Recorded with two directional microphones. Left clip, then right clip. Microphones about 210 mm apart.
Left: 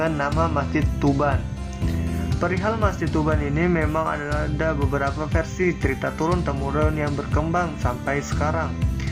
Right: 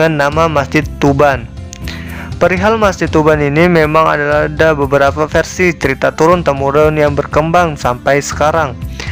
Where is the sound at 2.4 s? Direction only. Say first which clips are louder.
Right 13 dB; 45° right (ahead or behind).